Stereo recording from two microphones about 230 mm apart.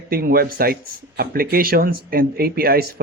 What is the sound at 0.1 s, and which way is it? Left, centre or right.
Speech, right.